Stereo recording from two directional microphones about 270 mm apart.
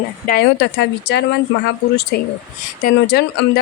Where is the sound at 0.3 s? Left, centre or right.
Left.